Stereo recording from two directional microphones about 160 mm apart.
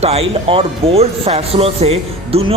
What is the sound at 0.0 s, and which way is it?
Speech, 40° right (ahead or behind).